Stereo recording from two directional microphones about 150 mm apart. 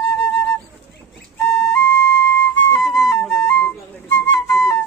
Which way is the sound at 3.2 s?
Centre (ahead or behind).